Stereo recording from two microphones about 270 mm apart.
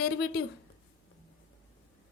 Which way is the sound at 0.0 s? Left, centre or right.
Left.